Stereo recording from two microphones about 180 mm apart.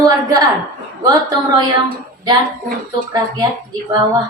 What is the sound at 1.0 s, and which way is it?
Speech, 20° right (ahead or behind).